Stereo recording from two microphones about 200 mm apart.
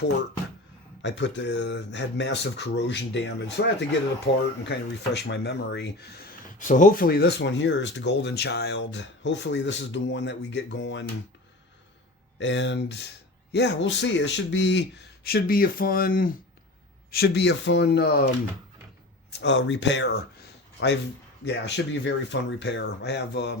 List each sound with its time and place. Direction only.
1.0 s speech: 60° left (ahead or behind)
6.6 s speech: 40° left (ahead or behind); by 11.0 s 65° left (ahead or behind)
12.4 s speech: 60° left (ahead or behind)
19.3 s speech: 60° left (ahead or behind)